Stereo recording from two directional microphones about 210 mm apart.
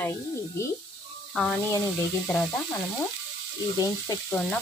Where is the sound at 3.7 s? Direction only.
15° left (ahead or behind).